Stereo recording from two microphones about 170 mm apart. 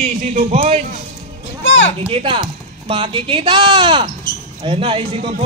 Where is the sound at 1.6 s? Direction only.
90° left.